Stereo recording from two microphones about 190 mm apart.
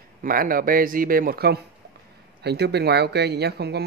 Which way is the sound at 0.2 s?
50° right (ahead or behind).